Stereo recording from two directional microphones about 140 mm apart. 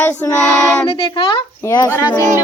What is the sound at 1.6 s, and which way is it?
Speech, 20° left (ahead or behind).